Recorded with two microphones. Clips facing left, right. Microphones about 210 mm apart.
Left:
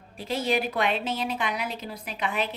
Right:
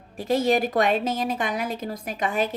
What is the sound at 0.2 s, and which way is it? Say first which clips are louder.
A woman's voice: right 6 dB; 45° right (ahead or behind).